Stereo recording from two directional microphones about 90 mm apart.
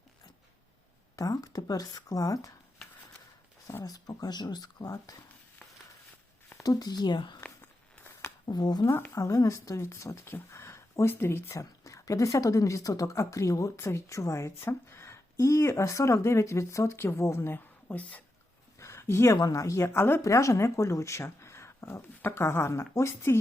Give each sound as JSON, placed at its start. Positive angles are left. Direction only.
{"t": 1.1, "sound": "speech", "side_deg": 40}
{"t": 3.8, "sound": "speech", "side_deg": 45}
{"t": 6.6, "sound": "speech", "side_deg": 45}
{"t": 8.4, "sound": "speech", "side_deg": 50}
{"t": 8.9, "sound": "speech", "side_deg": 25}
{"t": 9.1, "sound": "a woman's voice", "side_deg": 40}
{"t": 17.8, "sound": "speech", "side_deg": 15}
{"t": 18.8, "sound": "a sound", "side_deg": 30}
{"t": 19.4, "sound": "a woman's voice", "side_deg": 35}
{"t": 20.2, "sound": "a woman's voice", "side_deg": 35}